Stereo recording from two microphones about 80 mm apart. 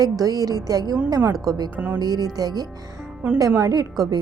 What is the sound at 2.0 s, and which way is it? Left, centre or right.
Speech, right.